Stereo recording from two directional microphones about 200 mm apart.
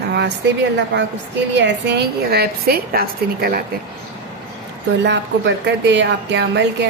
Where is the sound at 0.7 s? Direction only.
60° right (ahead or behind).